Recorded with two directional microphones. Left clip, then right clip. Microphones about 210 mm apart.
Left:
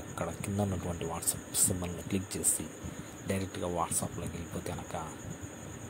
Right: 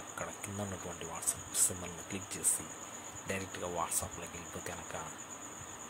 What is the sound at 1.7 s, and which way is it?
Speech, 20° left (ahead or behind).